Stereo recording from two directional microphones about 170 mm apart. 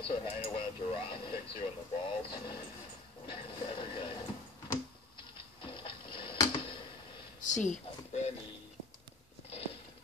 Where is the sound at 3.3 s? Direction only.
30° left (ahead or behind).